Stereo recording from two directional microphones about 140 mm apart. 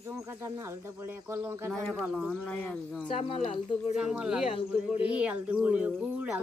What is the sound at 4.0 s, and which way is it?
Speech, 5° right (ahead or behind).